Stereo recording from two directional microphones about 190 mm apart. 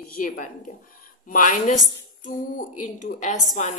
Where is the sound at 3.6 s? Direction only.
40° left (ahead or behind).